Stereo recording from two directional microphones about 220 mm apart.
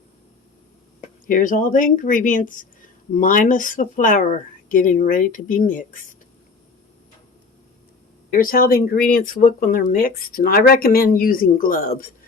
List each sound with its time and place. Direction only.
1.3 s speech: 35° left (ahead or behind)
8.3 s speech: 40° left (ahead or behind)